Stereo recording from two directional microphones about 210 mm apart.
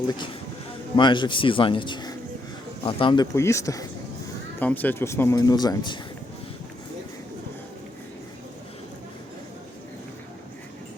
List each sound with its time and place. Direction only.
0.9 s a man's voice: 20° left (ahead or behind)